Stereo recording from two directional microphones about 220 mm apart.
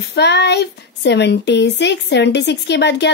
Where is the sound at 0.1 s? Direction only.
50° left (ahead or behind).